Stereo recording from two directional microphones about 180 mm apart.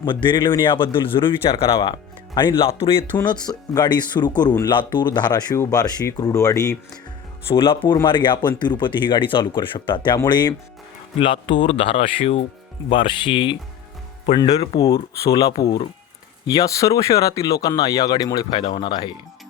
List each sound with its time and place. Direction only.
0.0 s speech: 25° left (ahead or behind)
7.4 s speech: 30° left (ahead or behind)
15.6 s speech: 60° left (ahead or behind)
16.5 s speech: 20° left (ahead or behind)